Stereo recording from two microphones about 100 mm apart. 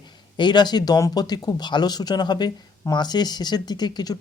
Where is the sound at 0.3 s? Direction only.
50° left (ahead or behind).